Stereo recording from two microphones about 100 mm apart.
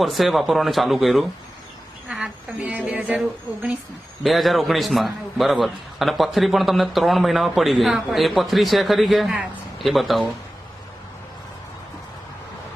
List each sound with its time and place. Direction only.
0.0 s a man's voice: centre (ahead or behind)